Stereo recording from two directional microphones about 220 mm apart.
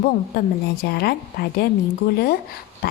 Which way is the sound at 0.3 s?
45° left (ahead or behind).